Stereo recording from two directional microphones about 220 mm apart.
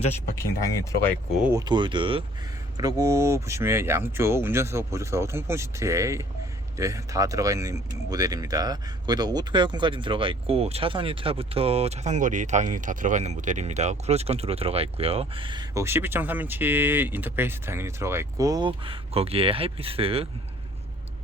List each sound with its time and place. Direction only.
1.0 s speech: 5° left (ahead or behind)
1.5 s speech: 20° right (ahead or behind)